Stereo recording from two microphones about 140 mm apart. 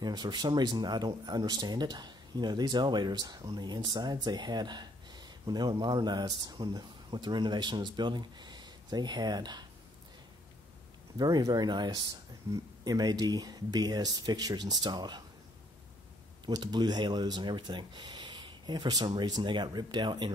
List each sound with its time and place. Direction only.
0.0 s speech: 30° right (ahead or behind)
11.1 s speech: 25° right (ahead or behind)
16.4 s speech: 30° right (ahead or behind)